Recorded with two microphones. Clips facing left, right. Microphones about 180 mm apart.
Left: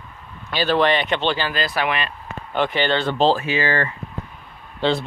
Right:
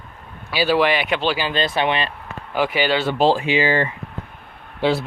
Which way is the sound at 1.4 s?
25° right (ahead or behind).